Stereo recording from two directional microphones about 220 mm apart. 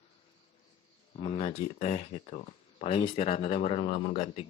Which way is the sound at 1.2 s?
30° left (ahead or behind).